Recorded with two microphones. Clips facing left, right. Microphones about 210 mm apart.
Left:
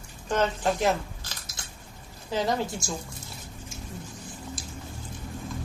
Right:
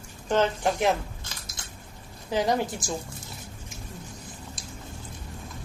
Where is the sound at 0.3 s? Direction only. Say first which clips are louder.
Right 2 dB; 20° right (ahead or behind).